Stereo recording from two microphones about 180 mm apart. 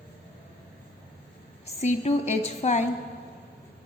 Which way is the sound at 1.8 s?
40° left (ahead or behind).